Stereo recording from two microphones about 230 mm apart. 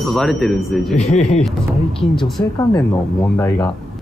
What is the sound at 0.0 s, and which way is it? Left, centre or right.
Speech, centre.